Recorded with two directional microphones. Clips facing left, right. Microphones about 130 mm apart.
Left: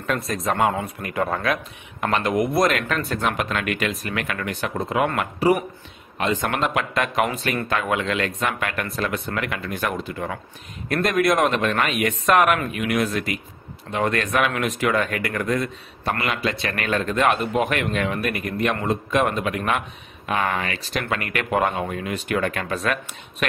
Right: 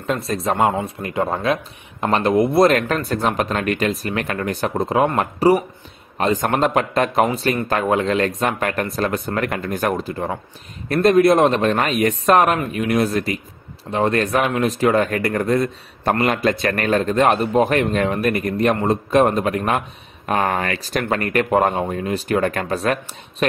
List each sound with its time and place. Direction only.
0.0 s speech: 25° right (ahead or behind)